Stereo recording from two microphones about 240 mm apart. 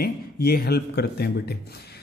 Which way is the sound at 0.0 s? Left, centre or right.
Left.